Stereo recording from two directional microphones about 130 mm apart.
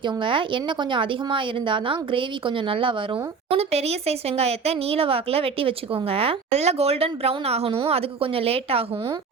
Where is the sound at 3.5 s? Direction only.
50° right (ahead or behind).